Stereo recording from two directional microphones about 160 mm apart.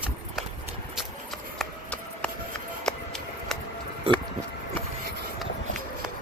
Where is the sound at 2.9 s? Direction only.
5° left (ahead or behind).